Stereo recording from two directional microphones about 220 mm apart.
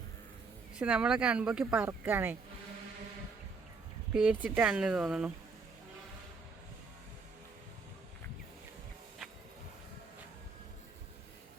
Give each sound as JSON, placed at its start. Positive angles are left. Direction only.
{"t": 0.8, "sound": "speech", "side_deg": -5}
{"t": 4.1, "sound": "speech", "side_deg": -5}